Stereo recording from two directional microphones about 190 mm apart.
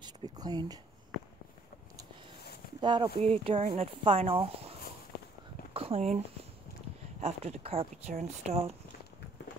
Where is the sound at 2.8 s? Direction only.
25° right (ahead or behind).